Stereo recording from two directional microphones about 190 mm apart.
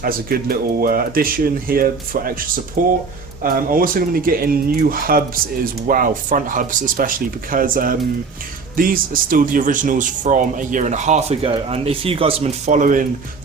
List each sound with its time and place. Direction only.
0.0 s a man's voice: 50° right (ahead or behind)